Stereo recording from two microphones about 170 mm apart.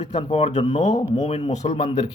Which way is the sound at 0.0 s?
35° left (ahead or behind).